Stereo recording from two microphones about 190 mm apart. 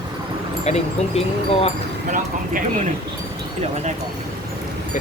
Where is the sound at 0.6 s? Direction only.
35° left (ahead or behind).